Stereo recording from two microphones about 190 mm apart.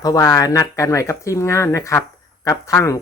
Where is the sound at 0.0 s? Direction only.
20° left (ahead or behind).